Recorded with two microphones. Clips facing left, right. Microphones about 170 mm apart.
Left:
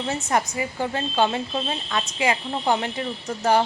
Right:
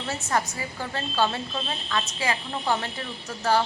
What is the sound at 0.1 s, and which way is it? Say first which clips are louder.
A woman's voice: left 2 dB; 20° left (ahead or behind).